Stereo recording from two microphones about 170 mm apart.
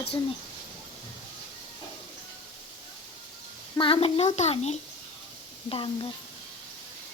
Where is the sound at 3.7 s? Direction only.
30° left (ahead or behind).